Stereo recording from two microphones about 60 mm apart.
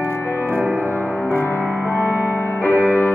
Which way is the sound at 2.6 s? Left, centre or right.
Left.